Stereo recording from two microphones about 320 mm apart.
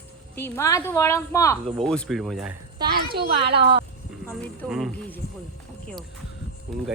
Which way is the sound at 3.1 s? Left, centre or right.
Centre.